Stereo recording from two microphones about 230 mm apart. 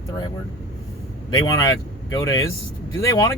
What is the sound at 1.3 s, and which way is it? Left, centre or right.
Speech, centre.